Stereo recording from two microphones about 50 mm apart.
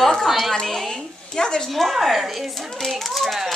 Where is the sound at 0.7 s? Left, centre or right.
Centre.